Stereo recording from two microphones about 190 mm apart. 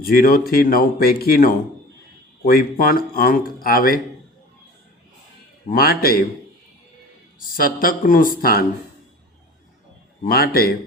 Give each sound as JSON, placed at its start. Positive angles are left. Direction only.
{"t": 0.0, "sound": "speech", "side_deg": 50}
{"t": 5.7, "sound": "speech", "side_deg": 50}
{"t": 7.3, "sound": "speech", "side_deg": 50}
{"t": 10.2, "sound": "speech", "side_deg": 50}